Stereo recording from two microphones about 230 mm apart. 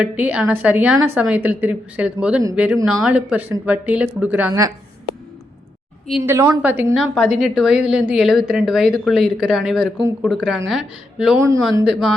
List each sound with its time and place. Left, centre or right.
0.0 s a woman's voice: centre
6.1 s a woman's voice: centre
11.3 s a woman's voice: centre
11.9 s a woman's voice: centre